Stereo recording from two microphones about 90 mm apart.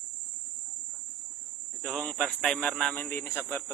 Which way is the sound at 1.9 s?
5° left (ahead or behind).